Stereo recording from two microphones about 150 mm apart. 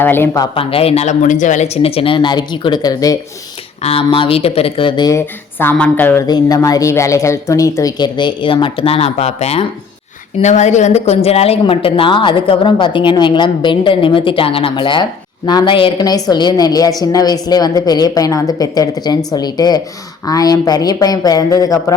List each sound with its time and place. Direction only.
0.0 s speech: 15° left (ahead or behind)
0.5 s speech: 40° left (ahead or behind)
3.8 s speech: 40° left (ahead or behind)
5.2 s speech: 15° left (ahead or behind)
6.2 s a woman's voice: 25° left (ahead or behind)